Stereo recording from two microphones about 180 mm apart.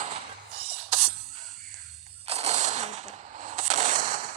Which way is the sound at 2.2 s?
35° right (ahead or behind).